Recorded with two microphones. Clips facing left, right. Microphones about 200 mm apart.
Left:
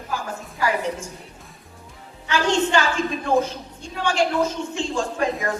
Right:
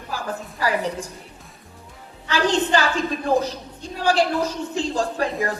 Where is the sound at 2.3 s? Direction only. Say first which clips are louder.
Even; 35° right (ahead or behind).